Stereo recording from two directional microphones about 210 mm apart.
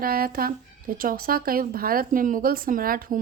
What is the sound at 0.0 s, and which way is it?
A woman's voice, 45° right (ahead or behind).